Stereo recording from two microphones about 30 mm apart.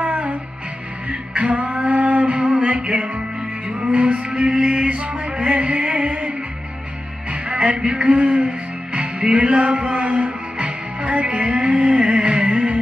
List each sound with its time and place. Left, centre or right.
0.0 s music: right
2.2 s music: right
7.2 s music: right
11.2 s music: right